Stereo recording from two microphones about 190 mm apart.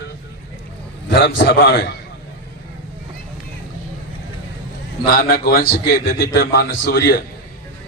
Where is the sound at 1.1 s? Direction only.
65° left (ahead or behind).